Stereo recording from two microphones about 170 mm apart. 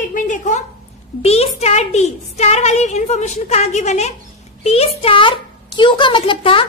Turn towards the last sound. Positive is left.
turn(degrees=30)  # may be behind; listen again after turning